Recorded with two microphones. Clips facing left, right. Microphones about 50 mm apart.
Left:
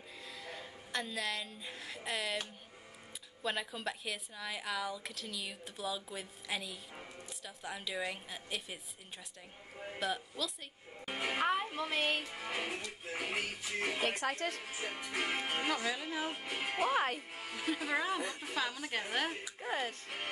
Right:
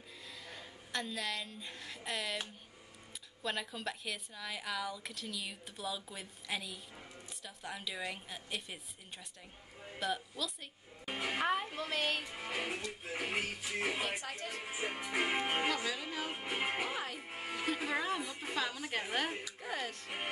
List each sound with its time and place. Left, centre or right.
0.2 s a woman's voice: centre
3.4 s a woman's voice: centre
9.9 s a woman's voice: centre
12.2 s a woman's voice: centre
14.0 s speech: left
14.5 s speech: centre
15.7 s speech: centre
16.3 s speech: centre
16.8 s speech: left
17.3 s music: right
17.6 s a woman's voice: centre
19.4 s speech: left